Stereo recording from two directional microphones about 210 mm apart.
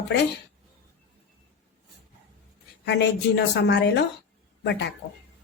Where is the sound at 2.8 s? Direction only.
55° left (ahead or behind).